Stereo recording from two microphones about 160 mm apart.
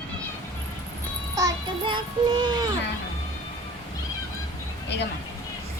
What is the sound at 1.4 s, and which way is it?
Child singing, 30° right (ahead or behind).